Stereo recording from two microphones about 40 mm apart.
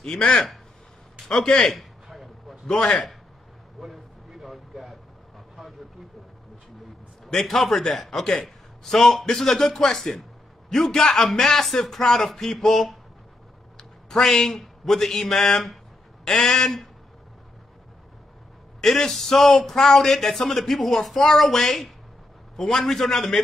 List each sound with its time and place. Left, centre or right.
0.2 s a man's voice: left
1.6 s a sound: centre
2.6 s a man's voice: centre
3.8 s vehicle: centre
7.2 s a man's voice: centre
18.8 s a man's voice: centre